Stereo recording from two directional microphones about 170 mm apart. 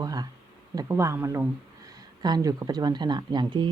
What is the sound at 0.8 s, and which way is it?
Speech, 15° right (ahead or behind).